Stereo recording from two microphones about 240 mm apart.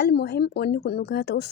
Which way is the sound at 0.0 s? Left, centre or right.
Left.